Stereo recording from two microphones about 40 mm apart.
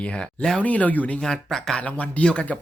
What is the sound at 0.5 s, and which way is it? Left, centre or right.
Speech, left.